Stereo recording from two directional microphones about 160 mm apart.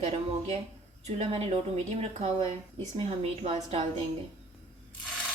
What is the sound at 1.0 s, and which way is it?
Speech, 45° right (ahead or behind).